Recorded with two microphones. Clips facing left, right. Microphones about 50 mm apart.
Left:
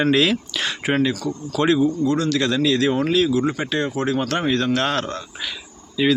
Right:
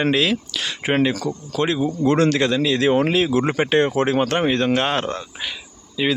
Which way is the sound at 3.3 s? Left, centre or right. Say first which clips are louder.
Right 4 dB; right.